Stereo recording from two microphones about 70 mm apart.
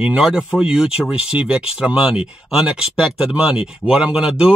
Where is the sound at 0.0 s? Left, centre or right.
Centre.